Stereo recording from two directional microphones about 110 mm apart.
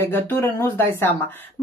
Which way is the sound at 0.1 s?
20° left (ahead or behind).